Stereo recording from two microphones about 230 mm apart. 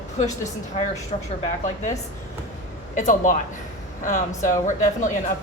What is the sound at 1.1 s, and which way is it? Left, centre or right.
A woman's voice, left.